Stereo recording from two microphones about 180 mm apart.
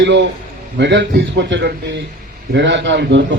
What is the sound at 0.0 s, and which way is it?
A man's voice, 80° right.